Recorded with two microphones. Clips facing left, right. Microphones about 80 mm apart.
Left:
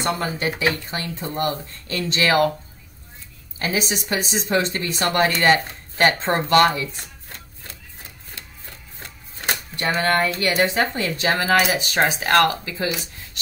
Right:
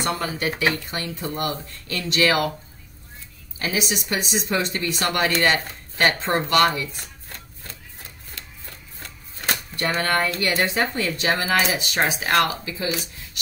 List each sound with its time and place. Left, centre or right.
0.0 s a woman's voice: left
3.5 s a woman's voice: left
8.4 s a sound: left
9.8 s a woman's voice: left